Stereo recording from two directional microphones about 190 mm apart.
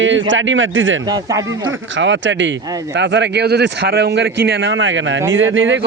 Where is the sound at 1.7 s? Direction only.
75° right (ahead or behind).